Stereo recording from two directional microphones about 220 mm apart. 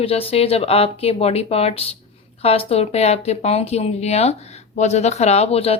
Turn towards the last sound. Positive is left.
turn(degrees=25)  # may be behind; listen again after turning